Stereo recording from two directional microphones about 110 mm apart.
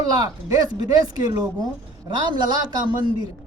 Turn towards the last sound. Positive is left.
turn(degrees=-40)  # may be behind; listen again after turning